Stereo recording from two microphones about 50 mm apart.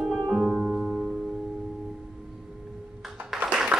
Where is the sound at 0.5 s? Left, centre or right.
Right.